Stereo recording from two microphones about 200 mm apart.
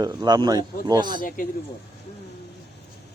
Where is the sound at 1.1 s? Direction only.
45° left (ahead or behind).